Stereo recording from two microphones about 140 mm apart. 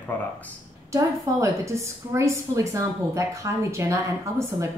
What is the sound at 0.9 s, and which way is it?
A woman's voice, 20° right (ahead or behind).